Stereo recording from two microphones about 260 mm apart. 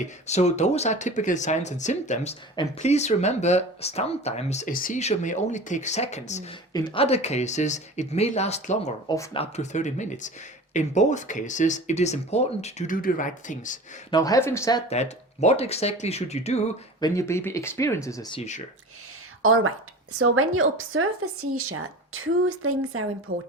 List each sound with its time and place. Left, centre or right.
0.3 s speech: left
14.1 s speech: centre
17.2 s speech: centre
19.4 s a woman's voice: right
23.3 s speech: right